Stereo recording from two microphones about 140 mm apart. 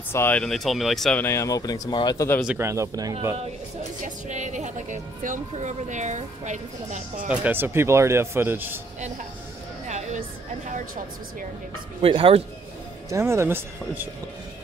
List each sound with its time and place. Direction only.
0.1 s speech: 15° left (ahead or behind)
0.4 s speech: centre (ahead or behind)
1.2 s speech: 20° left (ahead or behind)
2.6 s speech: 20° right (ahead or behind)
4.0 s a woman's voice: 60° right (ahead or behind)
7.2 s a man's voice: 15° right (ahead or behind)
9.8 s music: 55° right (ahead or behind)
12.0 s speech: 45° right (ahead or behind)
13.1 s a man's voice: 20° right (ahead or behind)